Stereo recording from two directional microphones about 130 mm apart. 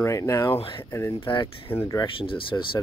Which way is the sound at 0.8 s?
20° left (ahead or behind).